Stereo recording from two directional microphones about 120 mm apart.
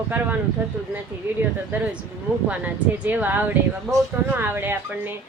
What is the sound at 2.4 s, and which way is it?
Speech, 15° right (ahead or behind).